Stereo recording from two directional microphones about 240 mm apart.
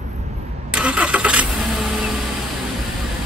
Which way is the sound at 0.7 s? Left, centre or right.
Centre.